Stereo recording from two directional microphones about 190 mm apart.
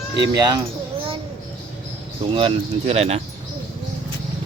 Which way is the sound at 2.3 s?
30° right (ahead or behind).